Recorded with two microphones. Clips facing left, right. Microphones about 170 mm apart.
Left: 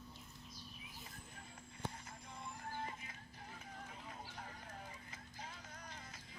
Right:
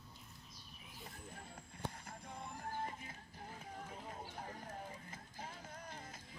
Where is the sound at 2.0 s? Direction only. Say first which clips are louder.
Right 2 dB; 50° right (ahead or behind).